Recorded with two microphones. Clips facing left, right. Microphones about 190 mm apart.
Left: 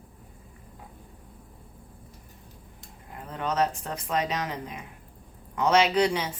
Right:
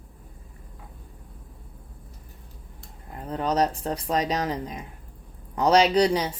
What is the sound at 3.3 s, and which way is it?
Speech, 35° right (ahead or behind).